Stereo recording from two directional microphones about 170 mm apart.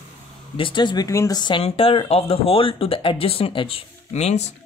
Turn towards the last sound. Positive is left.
turn(degrees=40)  # may be behind; listen again after turning